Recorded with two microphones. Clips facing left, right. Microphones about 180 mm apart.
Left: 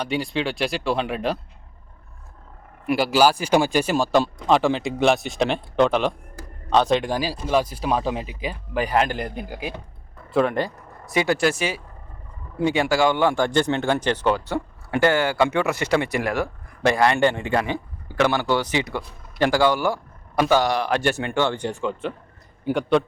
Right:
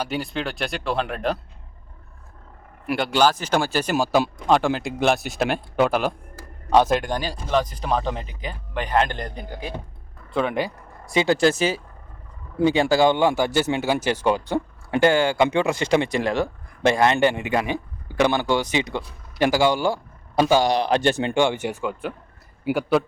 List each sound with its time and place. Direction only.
0.0 s speech: centre (ahead or behind)
2.8 s speech: 5° left (ahead or behind)
3.9 s speech: 5° right (ahead or behind)
10.3 s vehicle: centre (ahead or behind)
11.1 s speech: 25° right (ahead or behind)
13.2 s speech: 10° right (ahead or behind)
19.8 s a sound: 30° right (ahead or behind)
20.5 s speech: 15° right (ahead or behind)
21.6 s speech: 5° right (ahead or behind)